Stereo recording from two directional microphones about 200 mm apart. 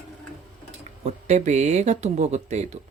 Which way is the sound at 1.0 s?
35° right (ahead or behind).